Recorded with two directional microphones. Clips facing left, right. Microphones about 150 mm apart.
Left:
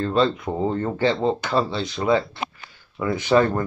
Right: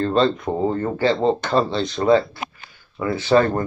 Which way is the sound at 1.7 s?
10° left (ahead or behind).